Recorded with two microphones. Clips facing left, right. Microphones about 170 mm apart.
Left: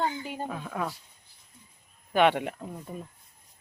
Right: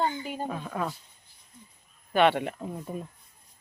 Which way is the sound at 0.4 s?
5° right (ahead or behind).